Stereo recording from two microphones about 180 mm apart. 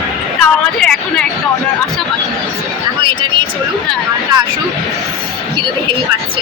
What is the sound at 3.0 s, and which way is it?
Speech, 25° right (ahead or behind).